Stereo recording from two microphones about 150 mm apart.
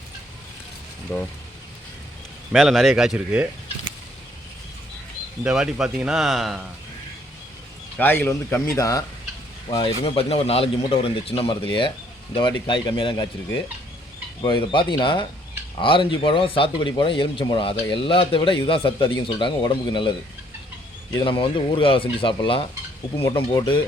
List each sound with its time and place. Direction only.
1.1 s speech: 15° left (ahead or behind)
2.5 s speech: centre (ahead or behind)
5.4 s speech: 5° right (ahead or behind)
7.9 s speech: 10° left (ahead or behind)
9.6 s a man's voice: 35° left (ahead or behind)
14.4 s a man's voice: 35° left (ahead or behind)
21.3 s a man's voice: 35° left (ahead or behind)